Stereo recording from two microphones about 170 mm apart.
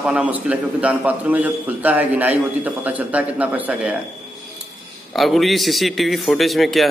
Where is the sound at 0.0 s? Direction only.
5° right (ahead or behind).